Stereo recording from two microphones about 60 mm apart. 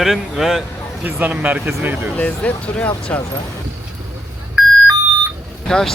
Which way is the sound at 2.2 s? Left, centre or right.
Left.